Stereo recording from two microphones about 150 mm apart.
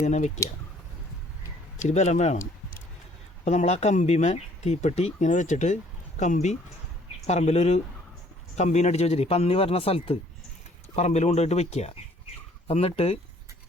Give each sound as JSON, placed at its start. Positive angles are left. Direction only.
{"t": 0.0, "sound": "speech", "side_deg": 50}
{"t": 1.8, "sound": "speech", "side_deg": 50}
{"t": 3.4, "sound": "speech", "side_deg": 50}